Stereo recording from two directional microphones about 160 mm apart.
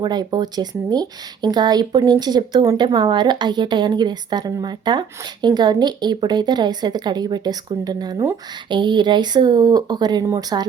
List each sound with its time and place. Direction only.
0.0 s speech: 25° right (ahead or behind)